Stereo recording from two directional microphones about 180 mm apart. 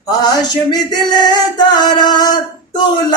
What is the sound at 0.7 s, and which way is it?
Music, 20° left (ahead or behind).